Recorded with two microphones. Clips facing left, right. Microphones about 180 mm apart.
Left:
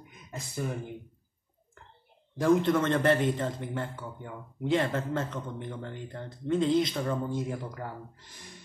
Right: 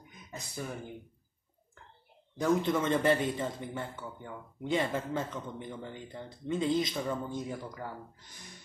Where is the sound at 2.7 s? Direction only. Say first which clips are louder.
Left 3 dB; 5° right (ahead or behind).